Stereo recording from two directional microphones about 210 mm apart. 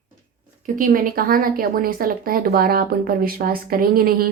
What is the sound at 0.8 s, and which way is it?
Speech, 40° right (ahead or behind).